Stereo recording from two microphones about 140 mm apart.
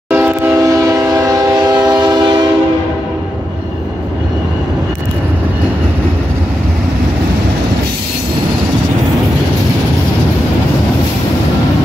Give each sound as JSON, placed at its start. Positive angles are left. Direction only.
{"t": 0.1, "sound": "train", "side_deg": -20}